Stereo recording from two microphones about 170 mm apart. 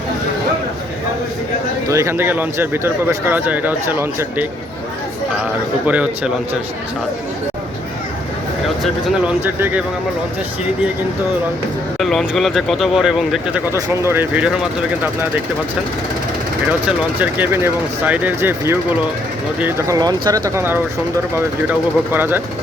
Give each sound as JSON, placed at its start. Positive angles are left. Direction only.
{"t": 1.9, "sound": "speech", "side_deg": -15}
{"t": 5.8, "sound": "speech", "side_deg": -10}
{"t": 8.8, "sound": "speech", "side_deg": -10}
{"t": 11.9, "sound": "speech", "side_deg": 0}
{"t": 13.7, "sound": "speech", "side_deg": -20}
{"t": 17.2, "sound": "speech", "side_deg": -10}
{"t": 20.0, "sound": "speech", "side_deg": -20}